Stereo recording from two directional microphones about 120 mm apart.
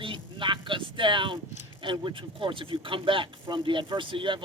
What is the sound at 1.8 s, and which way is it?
Speech, 45° right (ahead or behind).